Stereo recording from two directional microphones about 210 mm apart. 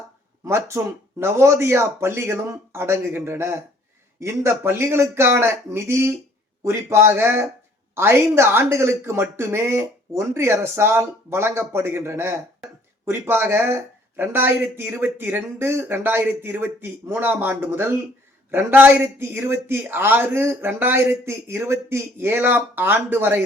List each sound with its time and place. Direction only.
0.4 s speech: 15° right (ahead or behind)